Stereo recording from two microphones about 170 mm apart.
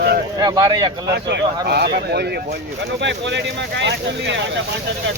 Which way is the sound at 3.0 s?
90° right.